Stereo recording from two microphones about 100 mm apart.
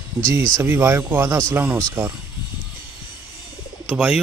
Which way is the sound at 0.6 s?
25° right (ahead or behind).